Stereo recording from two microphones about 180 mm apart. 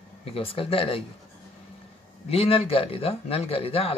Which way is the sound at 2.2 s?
30° left (ahead or behind).